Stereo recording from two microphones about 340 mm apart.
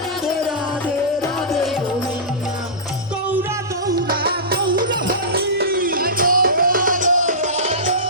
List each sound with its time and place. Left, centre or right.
3.9 s music: right